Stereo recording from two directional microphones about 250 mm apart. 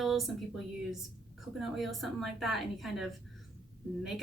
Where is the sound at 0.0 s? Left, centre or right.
Centre.